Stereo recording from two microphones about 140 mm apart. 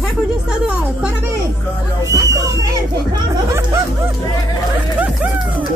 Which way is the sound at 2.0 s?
20° right (ahead or behind).